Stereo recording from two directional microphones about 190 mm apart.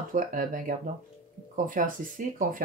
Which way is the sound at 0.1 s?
45° right (ahead or behind).